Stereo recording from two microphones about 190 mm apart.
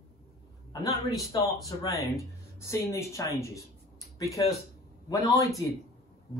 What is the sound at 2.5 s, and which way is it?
Speech, 15° left (ahead or behind).